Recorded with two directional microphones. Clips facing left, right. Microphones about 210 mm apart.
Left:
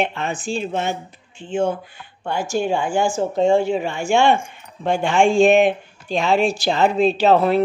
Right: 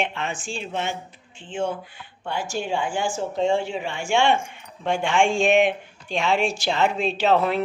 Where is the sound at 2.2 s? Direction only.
45° left (ahead or behind).